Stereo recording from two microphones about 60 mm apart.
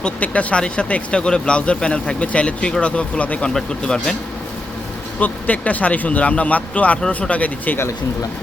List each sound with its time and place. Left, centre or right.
0.0 s speech: centre
3.5 s speech: centre
5.2 s speech: left